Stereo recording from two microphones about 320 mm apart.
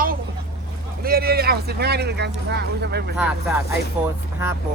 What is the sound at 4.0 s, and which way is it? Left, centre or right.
Speech, centre.